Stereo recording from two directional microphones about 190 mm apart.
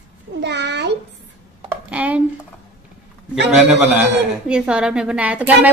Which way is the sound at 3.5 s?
5° right (ahead or behind).